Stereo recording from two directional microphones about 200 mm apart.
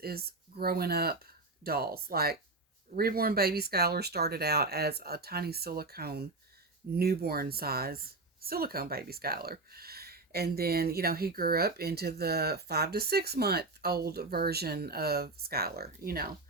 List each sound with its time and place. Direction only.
0.0 s a woman's voice: 50° right (ahead or behind)